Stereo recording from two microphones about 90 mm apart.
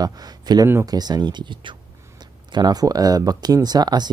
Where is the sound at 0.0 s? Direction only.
50° right (ahead or behind).